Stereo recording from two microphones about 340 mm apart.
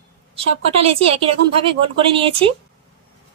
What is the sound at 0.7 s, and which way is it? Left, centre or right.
Speech, centre.